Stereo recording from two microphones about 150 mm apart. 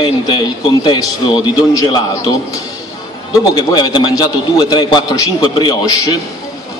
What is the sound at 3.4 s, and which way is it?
A man's voice, 30° left (ahead or behind).